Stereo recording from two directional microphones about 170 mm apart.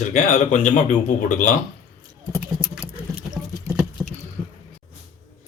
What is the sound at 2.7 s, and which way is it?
Rodents, 5° right (ahead or behind).